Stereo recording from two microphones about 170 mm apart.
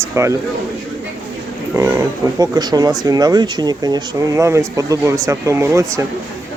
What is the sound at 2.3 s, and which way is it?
Speech, 20° right (ahead or behind).